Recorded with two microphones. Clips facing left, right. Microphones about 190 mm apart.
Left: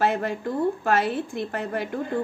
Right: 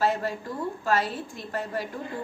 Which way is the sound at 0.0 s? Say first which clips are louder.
Left 3 dB; 60° left (ahead or behind).